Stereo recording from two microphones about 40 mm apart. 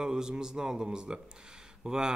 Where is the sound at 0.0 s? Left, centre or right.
Centre.